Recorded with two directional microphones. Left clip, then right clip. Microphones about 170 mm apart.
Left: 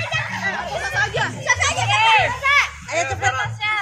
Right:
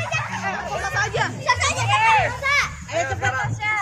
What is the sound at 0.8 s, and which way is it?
Music, 20° right (ahead or behind).